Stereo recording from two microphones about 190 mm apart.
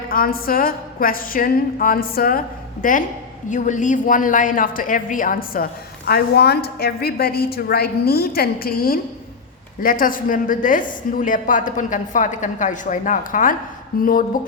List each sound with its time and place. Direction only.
0.1 s a woman's voice: 50° left (ahead or behind)